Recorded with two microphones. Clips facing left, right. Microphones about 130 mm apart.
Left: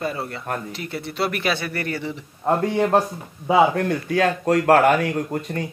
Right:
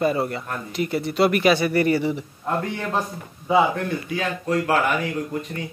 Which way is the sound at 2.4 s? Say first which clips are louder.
Left 7 dB; 50° left (ahead or behind).